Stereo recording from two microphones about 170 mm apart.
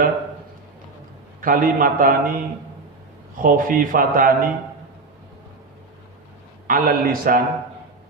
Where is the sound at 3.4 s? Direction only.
55° right (ahead or behind).